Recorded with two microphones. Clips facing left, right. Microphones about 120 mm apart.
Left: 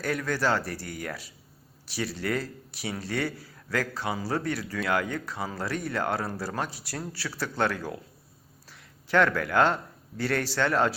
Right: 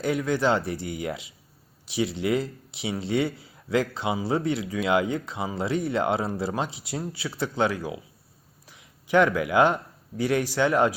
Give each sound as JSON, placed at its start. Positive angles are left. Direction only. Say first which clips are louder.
{"t": 0.0, "sound": "a man's voice", "louder": "right 4 dB", "side_deg": -20}